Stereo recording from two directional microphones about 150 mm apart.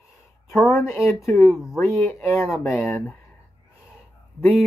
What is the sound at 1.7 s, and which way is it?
Speech, 20° left (ahead or behind).